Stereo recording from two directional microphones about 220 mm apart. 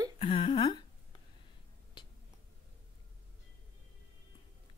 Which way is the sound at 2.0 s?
20° left (ahead or behind).